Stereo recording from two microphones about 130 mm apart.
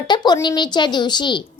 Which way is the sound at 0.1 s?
35° left (ahead or behind).